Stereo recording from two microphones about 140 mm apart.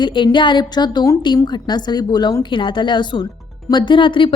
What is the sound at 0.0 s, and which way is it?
A woman's voice, 35° left (ahead or behind).